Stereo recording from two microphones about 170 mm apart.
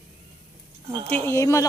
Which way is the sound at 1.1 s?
15° left (ahead or behind).